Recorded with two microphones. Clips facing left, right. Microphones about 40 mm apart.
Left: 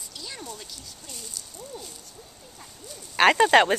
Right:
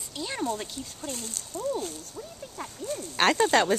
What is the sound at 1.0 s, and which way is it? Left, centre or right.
Speech, right.